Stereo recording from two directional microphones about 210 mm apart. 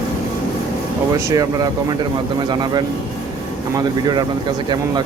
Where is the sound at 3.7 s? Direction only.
20° right (ahead or behind).